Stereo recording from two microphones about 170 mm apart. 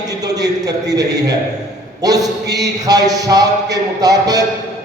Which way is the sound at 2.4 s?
80° right.